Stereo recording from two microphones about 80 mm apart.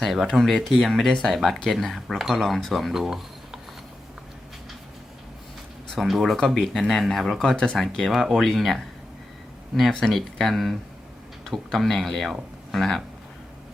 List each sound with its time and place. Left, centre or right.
0.0 s speech: centre
5.9 s speech: centre
9.9 s speech: centre